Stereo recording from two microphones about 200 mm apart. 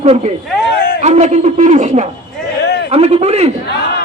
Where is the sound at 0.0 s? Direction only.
35° right (ahead or behind).